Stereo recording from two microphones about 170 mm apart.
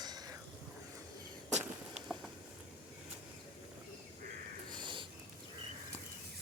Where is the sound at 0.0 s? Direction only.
25° right (ahead or behind).